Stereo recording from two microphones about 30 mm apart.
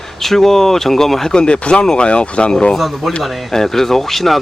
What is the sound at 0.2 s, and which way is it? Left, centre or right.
Speech, centre.